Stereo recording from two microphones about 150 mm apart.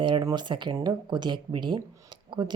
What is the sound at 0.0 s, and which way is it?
Speech, 30° right (ahead or behind).